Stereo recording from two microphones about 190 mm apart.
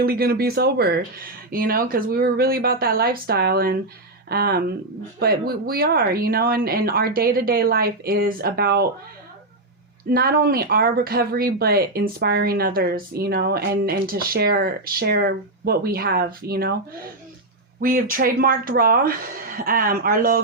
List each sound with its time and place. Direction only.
0.0 s speech: 55° right (ahead or behind)
10.1 s speech: 50° right (ahead or behind)
17.7 s speech: 45° right (ahead or behind)